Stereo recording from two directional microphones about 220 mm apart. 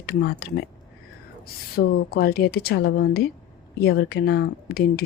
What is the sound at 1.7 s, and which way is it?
Speech, 45° left (ahead or behind).